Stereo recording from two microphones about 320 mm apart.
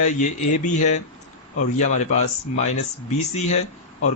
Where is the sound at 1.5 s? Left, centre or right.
Left.